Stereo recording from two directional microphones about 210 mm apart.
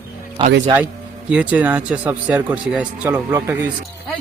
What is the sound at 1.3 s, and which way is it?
Speech, 5° right (ahead or behind).